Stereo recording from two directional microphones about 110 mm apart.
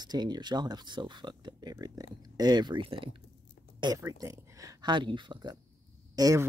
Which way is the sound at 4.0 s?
25° right (ahead or behind).